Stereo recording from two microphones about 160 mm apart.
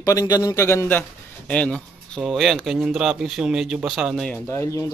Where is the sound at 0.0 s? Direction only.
20° left (ahead or behind); by 4.4 s 5° left (ahead or behind).